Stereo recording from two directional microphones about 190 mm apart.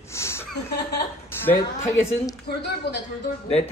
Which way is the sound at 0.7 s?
60° left (ahead or behind).